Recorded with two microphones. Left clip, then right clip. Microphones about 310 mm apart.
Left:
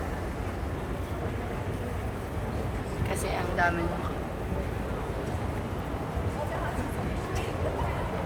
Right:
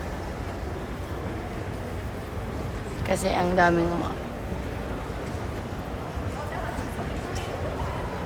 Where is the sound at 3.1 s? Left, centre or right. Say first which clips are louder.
Right 8 dB; centre.